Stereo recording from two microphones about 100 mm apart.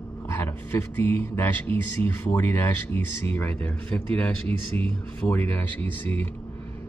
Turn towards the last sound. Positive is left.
turn(degrees=20)  # may be behind; listen again after turning